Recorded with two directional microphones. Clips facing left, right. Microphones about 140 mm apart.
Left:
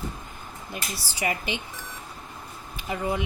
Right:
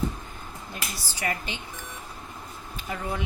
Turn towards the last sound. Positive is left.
turn(degrees=10)  # may be behind; listen again after turning